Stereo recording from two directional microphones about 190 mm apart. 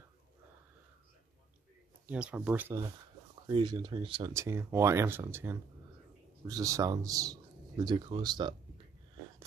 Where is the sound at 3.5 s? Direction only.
25° right (ahead or behind).